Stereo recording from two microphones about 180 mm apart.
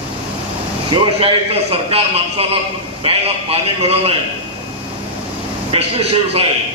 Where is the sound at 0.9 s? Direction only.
30° right (ahead or behind).